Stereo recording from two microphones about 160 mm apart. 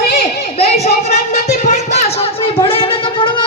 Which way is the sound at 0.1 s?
40° left (ahead or behind).